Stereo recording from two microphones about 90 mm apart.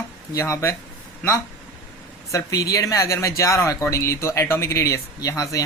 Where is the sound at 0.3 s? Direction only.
30° left (ahead or behind).